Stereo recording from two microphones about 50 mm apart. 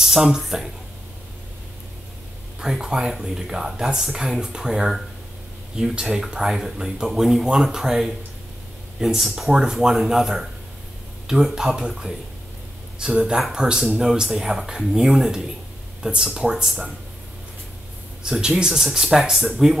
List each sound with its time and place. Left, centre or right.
0.0 s speech: centre
2.6 s speech: centre
18.2 s speech: centre